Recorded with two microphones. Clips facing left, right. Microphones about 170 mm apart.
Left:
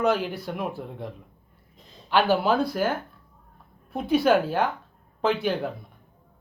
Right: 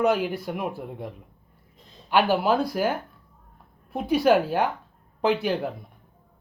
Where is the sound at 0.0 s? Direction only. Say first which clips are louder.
Right 1 dB; 10° right (ahead or behind).